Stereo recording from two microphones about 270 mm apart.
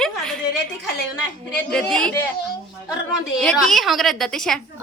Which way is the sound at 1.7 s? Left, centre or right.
Centre.